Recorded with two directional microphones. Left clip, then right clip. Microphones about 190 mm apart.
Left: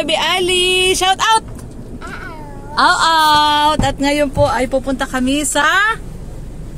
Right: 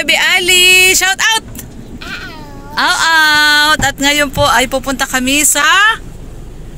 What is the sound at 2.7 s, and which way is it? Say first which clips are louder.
Speech: even; 40° right (ahead or behind).